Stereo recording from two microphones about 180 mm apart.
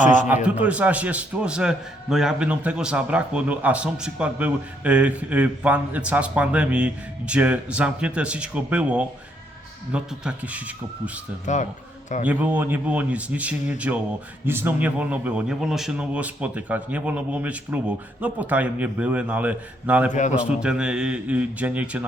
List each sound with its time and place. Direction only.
0.0 s a man's voice: 45° left (ahead or behind)
0.4 s a man's voice: 5° right (ahead or behind)
11.4 s a man's voice: 40° left (ahead or behind)
12.2 s a man's voice: 10° right (ahead or behind)